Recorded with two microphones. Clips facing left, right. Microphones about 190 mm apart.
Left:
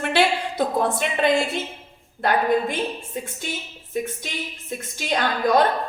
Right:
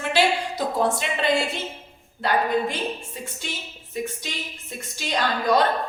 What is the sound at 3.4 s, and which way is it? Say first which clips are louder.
A woman's voice: left 3 dB; 50° left (ahead or behind).